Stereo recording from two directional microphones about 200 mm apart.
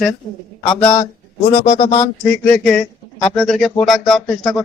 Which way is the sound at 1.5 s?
25° left (ahead or behind).